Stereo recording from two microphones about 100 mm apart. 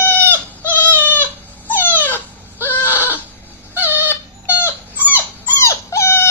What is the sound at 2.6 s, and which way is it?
Goat, 20° left (ahead or behind).